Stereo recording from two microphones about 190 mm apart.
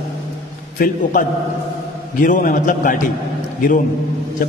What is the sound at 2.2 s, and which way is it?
Speech, 45° left (ahead or behind).